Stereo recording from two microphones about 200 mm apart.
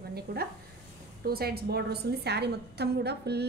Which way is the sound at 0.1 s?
50° right (ahead or behind).